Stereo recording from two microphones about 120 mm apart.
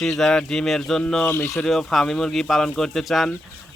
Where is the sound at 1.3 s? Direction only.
20° left (ahead or behind).